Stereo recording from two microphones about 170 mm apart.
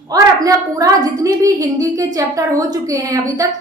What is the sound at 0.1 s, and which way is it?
A woman's voice, 20° right (ahead or behind).